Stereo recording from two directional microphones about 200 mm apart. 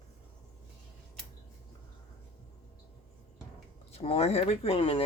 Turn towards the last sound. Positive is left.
turn(degrees=25)  # may be behind; listen again after turning